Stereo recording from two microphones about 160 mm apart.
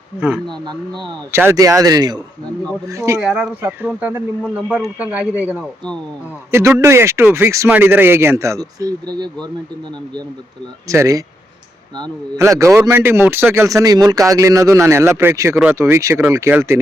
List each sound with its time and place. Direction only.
0.6 s speech: 30° right (ahead or behind)
1.3 s speech: 15° right (ahead or behind)
3.2 s speech: 5° right (ahead or behind); by 9.5 s 25° right (ahead or behind)
10.8 s speech: 20° right (ahead or behind)
12.4 s speech: 20° right (ahead or behind)